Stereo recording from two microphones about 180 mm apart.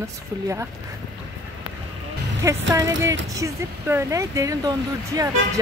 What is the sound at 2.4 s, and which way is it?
A woman's voice, 15° right (ahead or behind).